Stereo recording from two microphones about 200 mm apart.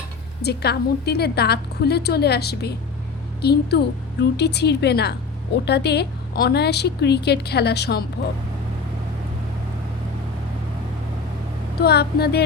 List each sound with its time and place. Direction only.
0.4 s a woman's voice: 55° left (ahead or behind)
11.8 s a woman's voice: 55° left (ahead or behind)